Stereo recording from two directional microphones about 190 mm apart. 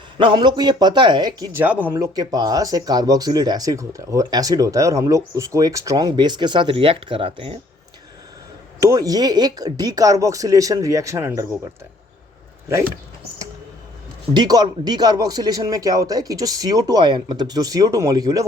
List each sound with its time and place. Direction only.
0.2 s speech: 25° right (ahead or behind)
1.5 s speech: 10° right (ahead or behind); by 7.6 s 30° right (ahead or behind)
8.8 s speech: 20° right (ahead or behind)
14.3 s speech: 20° right (ahead or behind)